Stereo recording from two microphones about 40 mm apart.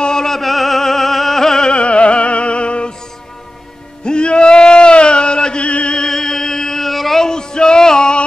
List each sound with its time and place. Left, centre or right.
0.0 s music: centre
0.4 s music: centre
1.7 s opera: left
4.0 s music: left
5.9 s chant: centre
6.9 s a sound: centre
7.2 s music: centre